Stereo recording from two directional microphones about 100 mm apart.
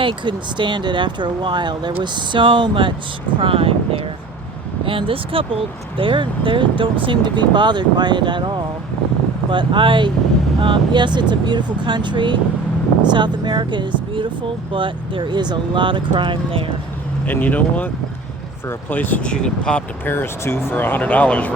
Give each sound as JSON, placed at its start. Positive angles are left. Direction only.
{"t": 0.0, "sound": "speech", "side_deg": -55}
{"t": 3.4, "sound": "speech", "side_deg": -65}
{"t": 17.2, "sound": "speech", "side_deg": 15}
{"t": 18.9, "sound": "speech", "side_deg": 15}
{"t": 20.1, "sound": "speech", "side_deg": 25}